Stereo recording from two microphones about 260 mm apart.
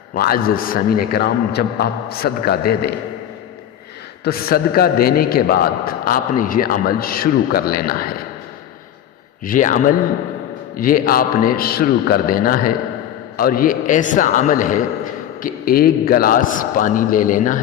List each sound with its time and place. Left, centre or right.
0.1 s a man's voice: left
4.2 s a man's voice: left
9.4 s a man's voice: left